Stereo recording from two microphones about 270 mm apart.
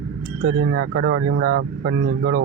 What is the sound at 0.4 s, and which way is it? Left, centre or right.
Speech, right.